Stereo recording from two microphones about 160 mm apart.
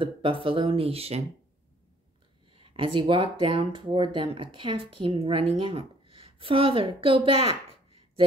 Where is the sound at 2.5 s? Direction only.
30° right (ahead or behind).